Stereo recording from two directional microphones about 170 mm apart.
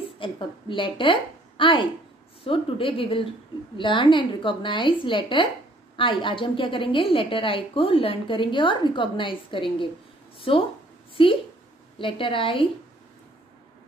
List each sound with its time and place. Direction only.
0.2 s a woman's voice: 30° left (ahead or behind)